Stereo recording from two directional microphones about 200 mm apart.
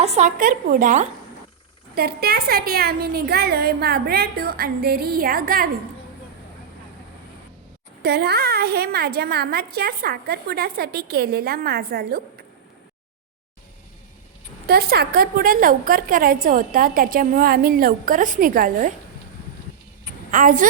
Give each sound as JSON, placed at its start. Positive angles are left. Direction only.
{"t": 0.0, "sound": "a woman's voice", "side_deg": -35}
{"t": 2.0, "sound": "a woman's voice", "side_deg": -50}
{"t": 8.0, "sound": "a woman's voice", "side_deg": -55}
{"t": 14.7, "sound": "a woman's voice", "side_deg": -50}
{"t": 20.3, "sound": "a woman's voice", "side_deg": -40}